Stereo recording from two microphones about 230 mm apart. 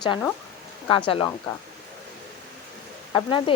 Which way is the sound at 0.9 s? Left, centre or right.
Left.